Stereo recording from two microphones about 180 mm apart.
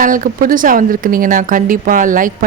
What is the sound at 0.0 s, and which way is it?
Speech, 45° right (ahead or behind).